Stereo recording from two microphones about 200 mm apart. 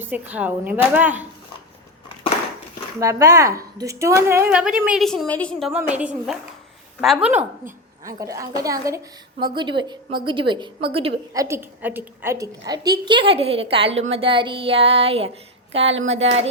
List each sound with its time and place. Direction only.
0.0 s a woman's voice: 10° right (ahead or behind)
3.0 s a woman's voice: 15° right (ahead or behind)
8.0 s a woman's voice: 15° right (ahead or behind)
11.4 s a woman's voice: 10° right (ahead or behind); by 15.3 s 30° right (ahead or behind)
16.0 s a sound: 30° right (ahead or behind)